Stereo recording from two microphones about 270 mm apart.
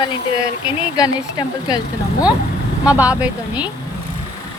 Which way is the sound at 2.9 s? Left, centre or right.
Centre.